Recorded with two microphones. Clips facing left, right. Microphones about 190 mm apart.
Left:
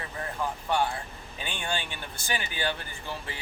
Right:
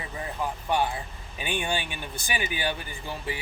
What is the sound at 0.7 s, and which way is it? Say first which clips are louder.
Speech: right 1 dB; 15° right (ahead or behind).